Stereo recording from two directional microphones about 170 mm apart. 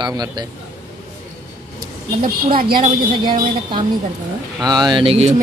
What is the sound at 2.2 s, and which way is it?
Speech, 55° right (ahead or behind).